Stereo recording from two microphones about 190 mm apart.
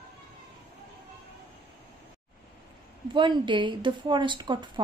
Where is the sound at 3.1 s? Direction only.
25° right (ahead or behind).